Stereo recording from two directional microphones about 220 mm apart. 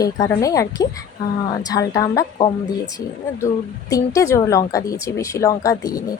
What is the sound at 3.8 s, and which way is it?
Speech, 15° left (ahead or behind).